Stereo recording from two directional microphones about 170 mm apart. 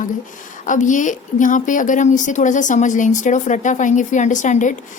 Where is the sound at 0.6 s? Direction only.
50° left (ahead or behind).